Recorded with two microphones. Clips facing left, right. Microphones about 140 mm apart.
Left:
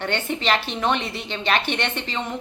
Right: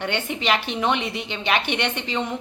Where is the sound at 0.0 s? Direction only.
15° right (ahead or behind).